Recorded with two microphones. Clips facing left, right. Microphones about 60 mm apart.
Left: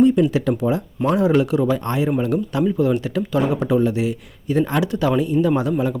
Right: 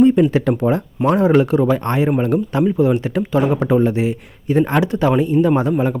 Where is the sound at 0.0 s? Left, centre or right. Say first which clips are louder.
Right 3 dB; right.